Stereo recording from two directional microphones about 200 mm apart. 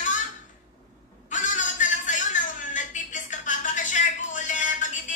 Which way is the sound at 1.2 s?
40° left (ahead or behind).